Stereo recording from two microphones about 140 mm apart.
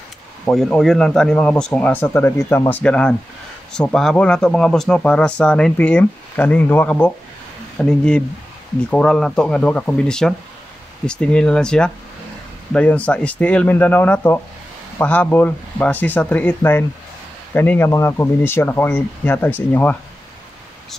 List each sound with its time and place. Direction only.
0.5 s speech: 5° left (ahead or behind)